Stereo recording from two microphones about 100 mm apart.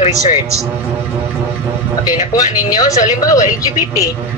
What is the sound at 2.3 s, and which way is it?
Speech, 40° left (ahead or behind).